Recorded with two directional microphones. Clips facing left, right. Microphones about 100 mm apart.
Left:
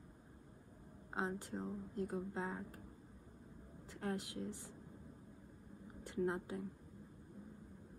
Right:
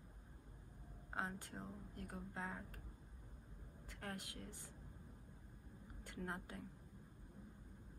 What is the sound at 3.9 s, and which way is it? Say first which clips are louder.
Speech: left 8 dB; 20° left (ahead or behind).